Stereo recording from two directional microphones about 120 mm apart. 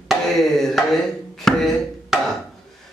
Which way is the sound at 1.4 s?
Centre (ahead or behind).